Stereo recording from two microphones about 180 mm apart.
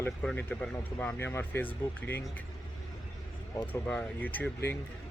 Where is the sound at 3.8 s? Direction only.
10° left (ahead or behind).